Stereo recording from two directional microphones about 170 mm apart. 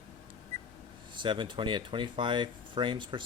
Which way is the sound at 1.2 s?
30° right (ahead or behind).